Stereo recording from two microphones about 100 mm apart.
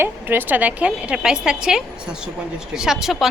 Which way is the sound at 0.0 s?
20° right (ahead or behind).